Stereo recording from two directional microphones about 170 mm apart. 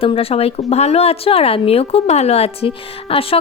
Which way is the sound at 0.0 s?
35° left (ahead or behind).